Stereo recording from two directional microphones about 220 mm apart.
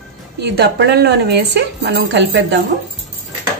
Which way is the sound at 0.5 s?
50° right (ahead or behind).